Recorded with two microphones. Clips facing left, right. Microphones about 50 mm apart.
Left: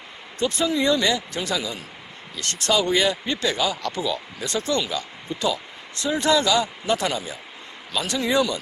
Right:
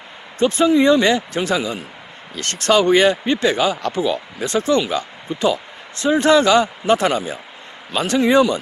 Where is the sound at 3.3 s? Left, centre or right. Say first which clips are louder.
Right 6 dB; right.